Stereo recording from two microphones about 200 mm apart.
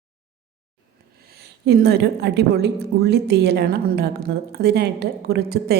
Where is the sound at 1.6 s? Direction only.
55° right (ahead or behind).